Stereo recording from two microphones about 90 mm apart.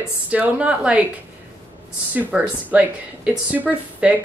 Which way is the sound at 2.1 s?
15° right (ahead or behind).